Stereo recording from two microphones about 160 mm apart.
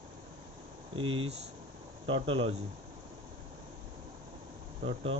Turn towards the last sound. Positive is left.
turn(degrees=-35)  # may be behind; listen again after turning